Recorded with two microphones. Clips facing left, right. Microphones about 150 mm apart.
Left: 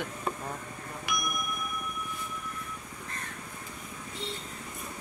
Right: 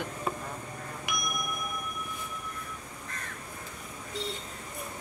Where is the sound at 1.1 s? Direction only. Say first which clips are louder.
Left 2 dB; 15° right (ahead or behind).